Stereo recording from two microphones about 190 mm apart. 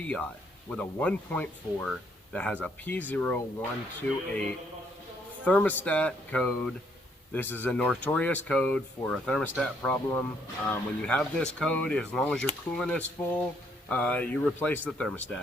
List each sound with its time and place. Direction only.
0.0 s speech: 5° left (ahead or behind)
5.5 s speech: 10° left (ahead or behind)